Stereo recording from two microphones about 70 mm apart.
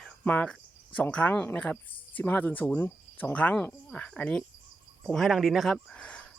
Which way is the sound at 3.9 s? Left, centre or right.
Centre.